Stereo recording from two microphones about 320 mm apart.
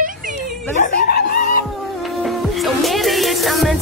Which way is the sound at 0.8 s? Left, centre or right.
Left.